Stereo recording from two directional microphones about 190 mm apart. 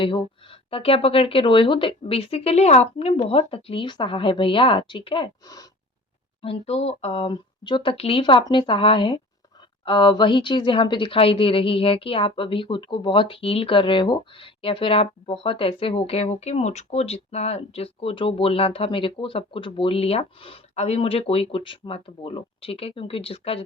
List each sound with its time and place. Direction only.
0.7 s speech: 30° left (ahead or behind)